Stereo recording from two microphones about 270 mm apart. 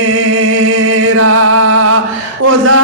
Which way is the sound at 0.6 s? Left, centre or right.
Right.